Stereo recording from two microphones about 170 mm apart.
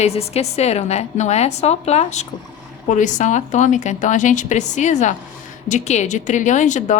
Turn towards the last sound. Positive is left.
turn(degrees=45)  # may be behind; listen again after turning